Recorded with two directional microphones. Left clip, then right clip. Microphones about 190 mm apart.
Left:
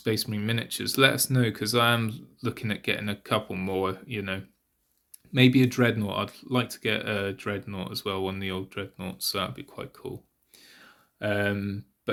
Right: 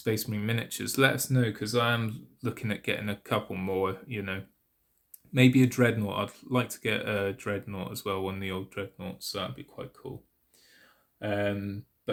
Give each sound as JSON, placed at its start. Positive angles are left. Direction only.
{"t": 0.0, "sound": "speech", "side_deg": 15}
{"t": 2.0, "sound": "speech", "side_deg": 15}
{"t": 9.0, "sound": "speech", "side_deg": 30}
{"t": 10.6, "sound": "a sound", "side_deg": 35}